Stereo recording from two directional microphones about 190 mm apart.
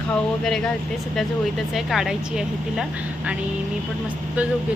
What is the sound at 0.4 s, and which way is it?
Speech, 5° left (ahead or behind).